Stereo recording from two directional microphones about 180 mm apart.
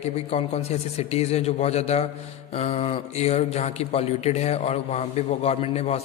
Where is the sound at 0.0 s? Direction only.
35° left (ahead or behind).